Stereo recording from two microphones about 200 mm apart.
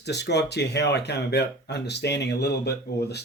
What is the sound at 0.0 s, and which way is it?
Speech, 55° left (ahead or behind).